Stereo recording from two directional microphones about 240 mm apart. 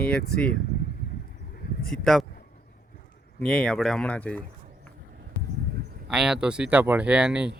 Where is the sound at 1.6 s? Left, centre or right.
Left.